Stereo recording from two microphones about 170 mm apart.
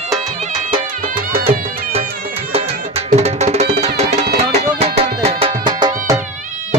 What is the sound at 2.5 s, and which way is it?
Music, 35° right (ahead or behind).